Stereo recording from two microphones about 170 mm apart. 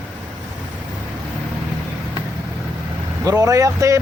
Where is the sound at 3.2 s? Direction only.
20° right (ahead or behind).